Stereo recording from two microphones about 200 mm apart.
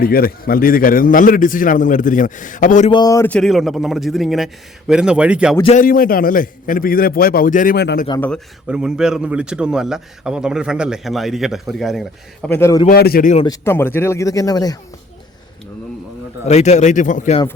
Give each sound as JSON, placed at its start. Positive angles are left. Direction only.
{"t": 0.0, "sound": "a man's voice", "side_deg": 45}
{"t": 2.9, "sound": "speech", "side_deg": 20}
{"t": 5.6, "sound": "a man's voice", "side_deg": 40}
{"t": 8.6, "sound": "speech", "side_deg": -5}
{"t": 12.5, "sound": "speech", "side_deg": 15}
{"t": 12.9, "sound": "a man's voice", "side_deg": 50}
{"t": 13.3, "sound": "speech", "side_deg": 25}
{"t": 13.7, "sound": "speech", "side_deg": 10}
{"t": 16.5, "sound": "a man's voice", "side_deg": 35}